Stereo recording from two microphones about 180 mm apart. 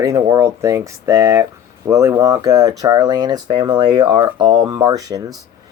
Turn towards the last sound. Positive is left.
turn(degrees=-20)  # may be behind; listen again after turning